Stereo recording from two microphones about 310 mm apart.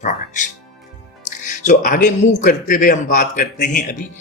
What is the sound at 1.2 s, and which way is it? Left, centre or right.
Speech, left.